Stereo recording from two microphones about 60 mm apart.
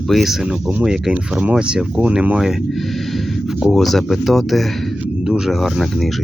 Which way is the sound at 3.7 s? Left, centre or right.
Centre.